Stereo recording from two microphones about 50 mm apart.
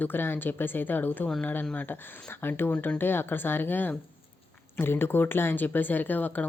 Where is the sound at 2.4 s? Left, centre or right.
Left.